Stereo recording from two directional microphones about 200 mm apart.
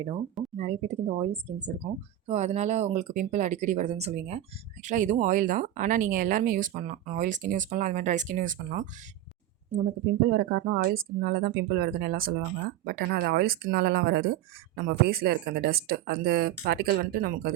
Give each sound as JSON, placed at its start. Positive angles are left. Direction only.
{"t": 0.5, "sound": "speech", "side_deg": -35}
{"t": 10.2, "sound": "speech", "side_deg": -50}